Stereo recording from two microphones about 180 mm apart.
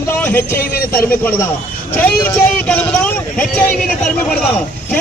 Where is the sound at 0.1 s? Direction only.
10° left (ahead or behind).